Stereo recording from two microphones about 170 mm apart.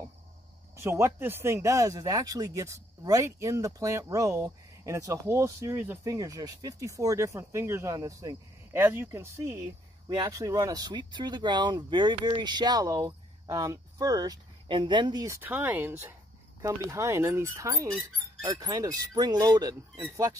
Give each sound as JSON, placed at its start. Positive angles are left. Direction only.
{"t": 0.7, "sound": "speech", "side_deg": -15}
{"t": 15.4, "sound": "speech", "side_deg": -10}